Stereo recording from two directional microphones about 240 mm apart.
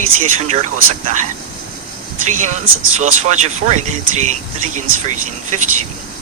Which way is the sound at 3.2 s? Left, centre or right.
Right.